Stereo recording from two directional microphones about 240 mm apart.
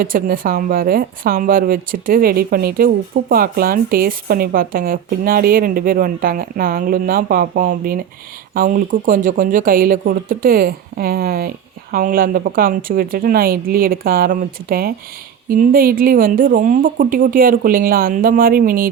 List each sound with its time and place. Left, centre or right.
0.0 s a woman's voice: right